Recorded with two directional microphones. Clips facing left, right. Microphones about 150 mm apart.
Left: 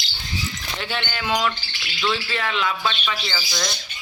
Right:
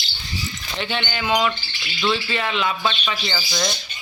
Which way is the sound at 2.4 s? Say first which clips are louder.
Even; 20° right (ahead or behind).